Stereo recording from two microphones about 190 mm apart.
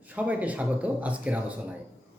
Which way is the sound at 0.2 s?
10° right (ahead or behind).